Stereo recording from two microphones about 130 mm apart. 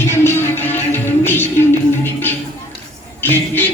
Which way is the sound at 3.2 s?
15° left (ahead or behind).